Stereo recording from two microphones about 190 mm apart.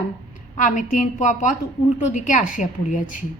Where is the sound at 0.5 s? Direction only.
40° left (ahead or behind).